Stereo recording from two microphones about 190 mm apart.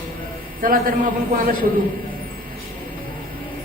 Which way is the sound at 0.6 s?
45° right (ahead or behind).